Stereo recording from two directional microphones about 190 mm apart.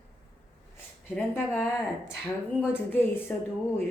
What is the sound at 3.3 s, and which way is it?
Speech, 10° left (ahead or behind).